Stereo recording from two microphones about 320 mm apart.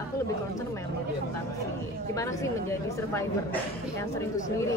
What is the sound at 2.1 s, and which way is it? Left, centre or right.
A woman's voice, centre.